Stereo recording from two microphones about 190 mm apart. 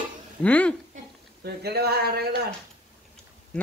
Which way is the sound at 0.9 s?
55° right (ahead or behind).